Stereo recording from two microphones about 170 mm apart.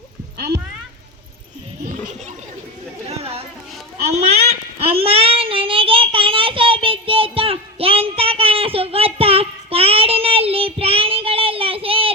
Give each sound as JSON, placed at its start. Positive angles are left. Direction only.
{"t": 3.1, "sound": "chatter", "side_deg": -35}
{"t": 4.8, "sound": "child singing", "side_deg": -35}